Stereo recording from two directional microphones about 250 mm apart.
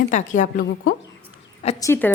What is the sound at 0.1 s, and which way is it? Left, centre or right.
Speech, left.